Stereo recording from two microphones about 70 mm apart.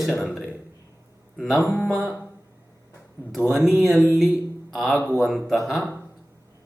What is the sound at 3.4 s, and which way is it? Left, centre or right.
Speech, centre.